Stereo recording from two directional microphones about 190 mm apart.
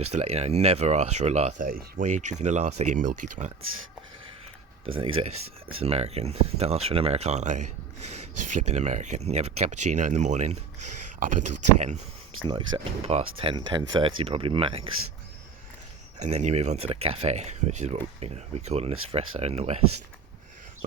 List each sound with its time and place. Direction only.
0.0 s speech: 35° right (ahead or behind)
4.9 s speech: 30° right (ahead or behind)
12.5 s speech: 25° right (ahead or behind)
16.1 s speech: 40° right (ahead or behind)